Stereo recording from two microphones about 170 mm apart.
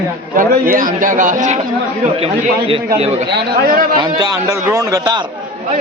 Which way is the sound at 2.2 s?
35° right (ahead or behind).